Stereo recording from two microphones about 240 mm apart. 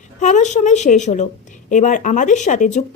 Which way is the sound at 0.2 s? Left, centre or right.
Left.